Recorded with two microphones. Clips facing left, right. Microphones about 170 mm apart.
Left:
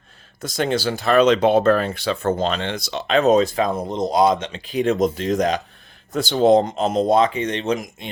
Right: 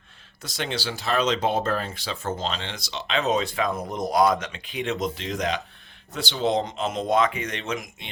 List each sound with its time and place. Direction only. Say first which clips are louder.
0.4 s speech: left 9 dB; 45° left (ahead or behind)